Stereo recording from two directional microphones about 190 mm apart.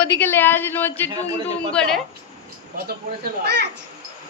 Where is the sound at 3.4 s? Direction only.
60° right (ahead or behind).